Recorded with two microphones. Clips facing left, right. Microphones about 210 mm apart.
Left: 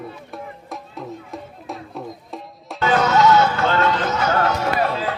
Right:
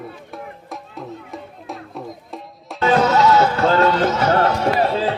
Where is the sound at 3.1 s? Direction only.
35° right (ahead or behind).